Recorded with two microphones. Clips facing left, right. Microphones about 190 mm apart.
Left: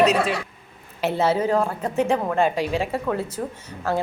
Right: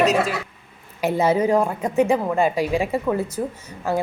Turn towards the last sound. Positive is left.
turn(degrees=-15)  # may be behind; listen again after turning